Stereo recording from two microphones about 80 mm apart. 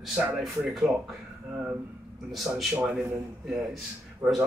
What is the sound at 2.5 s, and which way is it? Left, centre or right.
Speech, centre.